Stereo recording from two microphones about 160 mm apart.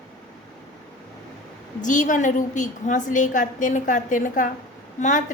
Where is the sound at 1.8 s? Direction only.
50° left (ahead or behind).